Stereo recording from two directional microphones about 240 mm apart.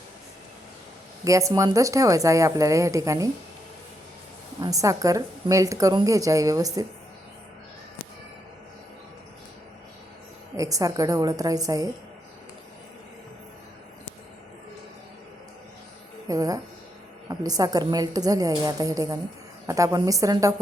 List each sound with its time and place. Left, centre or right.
1.2 s a woman's voice: centre
4.6 s a woman's voice: centre
10.6 s a woman's voice: centre
16.3 s a woman's voice: centre